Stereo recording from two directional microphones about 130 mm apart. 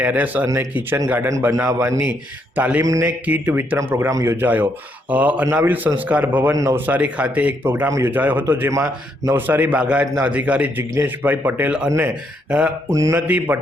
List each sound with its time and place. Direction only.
0.0 s speech: 10° right (ahead or behind)
1.6 s speech: 25° right (ahead or behind)
2.8 s speech: 25° right (ahead or behind)
3.1 s speech: 10° right (ahead or behind)
6.5 s speech: 25° right (ahead or behind)
12.5 s speech: 10° right (ahead or behind)
12.9 s speech: 25° right (ahead or behind)
13.2 s speech: 10° right (ahead or behind)